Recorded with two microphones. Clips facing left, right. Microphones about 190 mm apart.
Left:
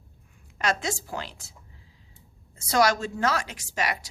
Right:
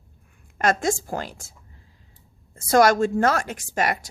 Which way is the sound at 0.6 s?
50° right (ahead or behind).